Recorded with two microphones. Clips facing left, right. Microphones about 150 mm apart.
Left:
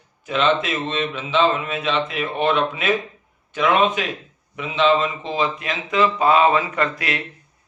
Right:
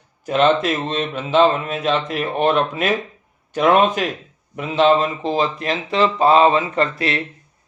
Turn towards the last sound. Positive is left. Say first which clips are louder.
# right 3 dB
turn(degrees=-30)  # may be behind; listen again after turning